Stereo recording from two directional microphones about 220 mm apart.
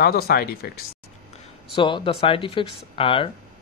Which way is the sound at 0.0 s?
45° left (ahead or behind).